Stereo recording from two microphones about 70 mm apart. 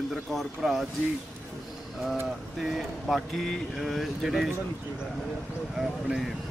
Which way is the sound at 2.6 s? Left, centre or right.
Centre.